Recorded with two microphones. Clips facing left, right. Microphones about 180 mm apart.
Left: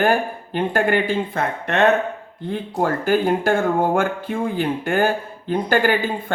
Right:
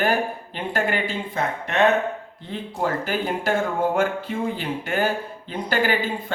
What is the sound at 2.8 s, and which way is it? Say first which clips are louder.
Speech: left 6 dB; 50° left (ahead or behind).